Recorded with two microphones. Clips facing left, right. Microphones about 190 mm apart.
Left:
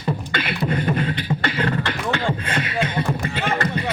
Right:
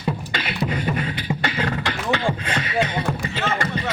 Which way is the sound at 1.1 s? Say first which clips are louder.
Left 1 dB; 10° right (ahead or behind).